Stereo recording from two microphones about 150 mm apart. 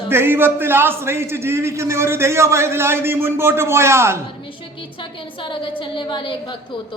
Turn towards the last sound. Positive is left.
turn(degrees=30)  # may be behind; listen again after turning